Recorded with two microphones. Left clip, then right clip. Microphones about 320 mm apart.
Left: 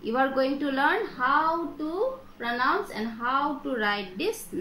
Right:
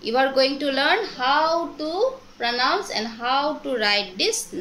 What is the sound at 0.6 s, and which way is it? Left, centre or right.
Speech, right.